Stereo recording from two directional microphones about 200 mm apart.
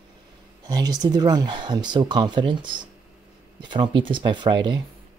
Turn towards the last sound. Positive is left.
turn(degrees=-20)  # may be behind; listen again after turning